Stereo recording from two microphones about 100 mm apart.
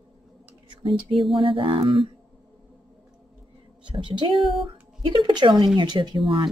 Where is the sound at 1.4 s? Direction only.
60° right (ahead or behind).